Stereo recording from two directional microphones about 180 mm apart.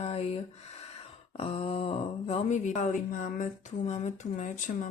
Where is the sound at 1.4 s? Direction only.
30° left (ahead or behind).